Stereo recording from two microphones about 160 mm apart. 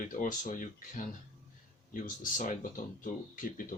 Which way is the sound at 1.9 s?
55° left (ahead or behind).